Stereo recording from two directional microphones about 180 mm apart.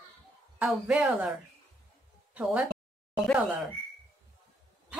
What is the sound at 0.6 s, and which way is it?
Speech, 5° right (ahead or behind).